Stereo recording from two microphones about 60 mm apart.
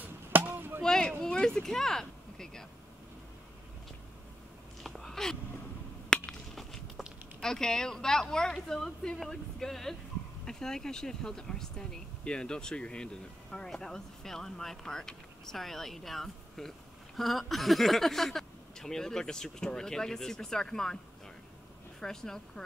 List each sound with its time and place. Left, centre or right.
0.0 s chop: right
0.8 s speech: centre
1.2 s a sound: centre
4.8 s a sound: centre
7.3 s speech: centre
22.0 s speech: centre